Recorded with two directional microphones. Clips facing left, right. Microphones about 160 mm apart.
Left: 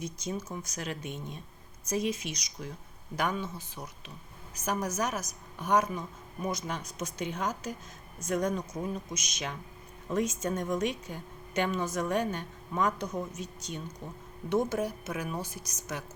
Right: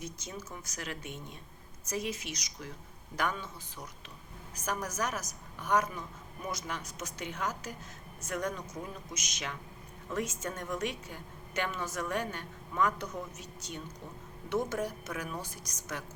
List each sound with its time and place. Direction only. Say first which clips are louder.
0.0 s a woman's voice: left 6 dB; 20° left (ahead or behind)
15.1 s a woman's voice: left 3 dB; 20° left (ahead or behind)
15.4 s a woman's voice: left 4 dB; 10° left (ahead or behind)